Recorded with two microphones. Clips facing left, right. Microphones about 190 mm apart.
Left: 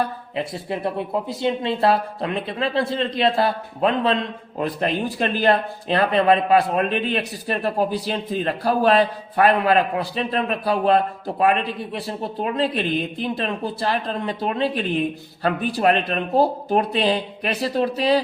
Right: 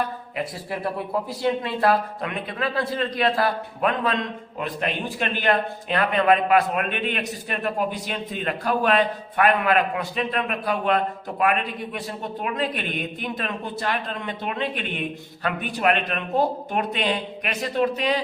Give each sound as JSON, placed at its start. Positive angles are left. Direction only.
{"t": 0.3, "sound": "speech", "side_deg": 25}